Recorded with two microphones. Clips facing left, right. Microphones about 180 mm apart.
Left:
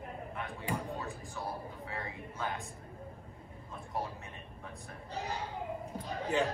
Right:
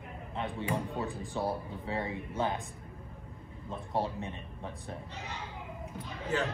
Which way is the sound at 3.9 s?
30° right (ahead or behind).